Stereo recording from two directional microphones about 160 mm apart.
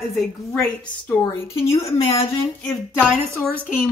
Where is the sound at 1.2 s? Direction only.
15° left (ahead or behind).